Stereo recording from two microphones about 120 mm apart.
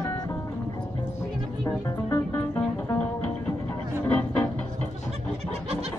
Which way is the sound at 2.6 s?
15° left (ahead or behind).